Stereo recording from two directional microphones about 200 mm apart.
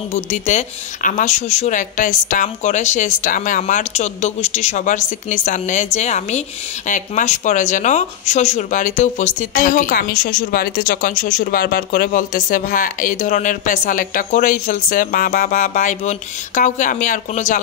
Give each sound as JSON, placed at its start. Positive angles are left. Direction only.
{"t": 0.1, "sound": "speech", "side_deg": 35}